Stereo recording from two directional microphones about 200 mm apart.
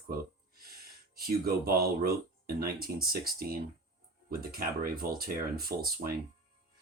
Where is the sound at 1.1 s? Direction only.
50° right (ahead or behind).